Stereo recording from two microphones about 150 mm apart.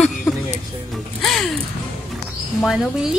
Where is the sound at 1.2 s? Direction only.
Centre (ahead or behind).